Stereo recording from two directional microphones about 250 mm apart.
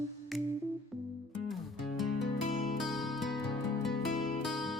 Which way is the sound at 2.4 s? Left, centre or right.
Left.